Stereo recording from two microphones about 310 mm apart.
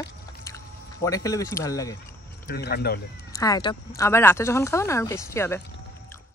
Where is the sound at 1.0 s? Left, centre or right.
Centre.